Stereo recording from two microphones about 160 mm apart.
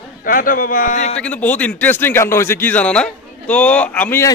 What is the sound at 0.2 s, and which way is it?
Speech, 60° left (ahead or behind).